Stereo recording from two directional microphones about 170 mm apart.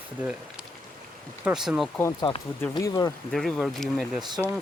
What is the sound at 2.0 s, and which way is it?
Speech, 20° left (ahead or behind).